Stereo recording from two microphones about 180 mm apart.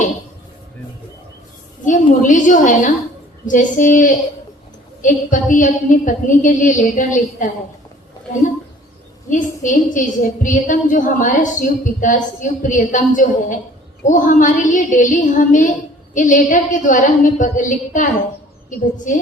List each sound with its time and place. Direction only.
1.8 s a woman's voice: 45° left (ahead or behind)
9.3 s a woman's voice: 45° left (ahead or behind)